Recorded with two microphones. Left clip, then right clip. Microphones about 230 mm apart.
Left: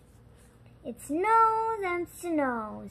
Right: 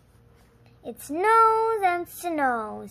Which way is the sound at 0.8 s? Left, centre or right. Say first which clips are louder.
Right 4 dB; right.